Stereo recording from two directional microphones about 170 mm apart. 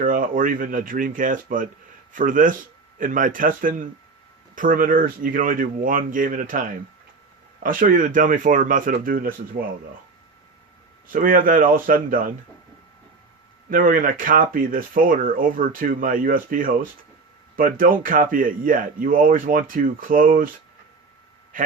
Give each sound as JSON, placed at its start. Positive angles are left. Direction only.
{"t": 0.0, "sound": "speech", "side_deg": -55}
{"t": 11.1, "sound": "speech", "side_deg": -55}
{"t": 13.7, "sound": "speech", "side_deg": -55}
{"t": 21.5, "sound": "a man's voice", "side_deg": -50}